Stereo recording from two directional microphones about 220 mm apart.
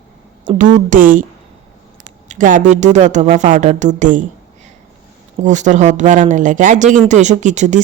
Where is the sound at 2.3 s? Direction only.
35° right (ahead or behind).